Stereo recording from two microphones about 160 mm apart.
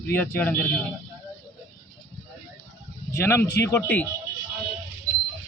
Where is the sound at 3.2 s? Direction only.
15° left (ahead or behind).